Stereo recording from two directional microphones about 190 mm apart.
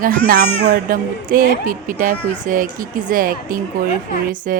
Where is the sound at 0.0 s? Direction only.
45° right (ahead or behind).